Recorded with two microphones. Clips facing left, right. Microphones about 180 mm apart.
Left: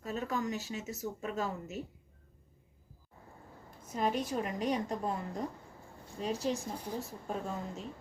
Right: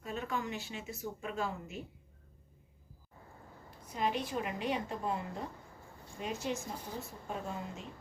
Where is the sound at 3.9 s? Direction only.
45° left (ahead or behind).